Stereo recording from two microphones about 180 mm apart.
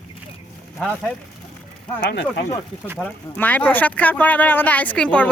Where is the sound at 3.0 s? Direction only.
10° left (ahead or behind).